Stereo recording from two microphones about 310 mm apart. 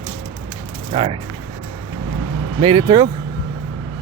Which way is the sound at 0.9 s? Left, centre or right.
Centre.